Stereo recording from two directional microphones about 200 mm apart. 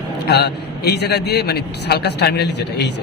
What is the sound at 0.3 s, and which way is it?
A man's voice, 55° left (ahead or behind).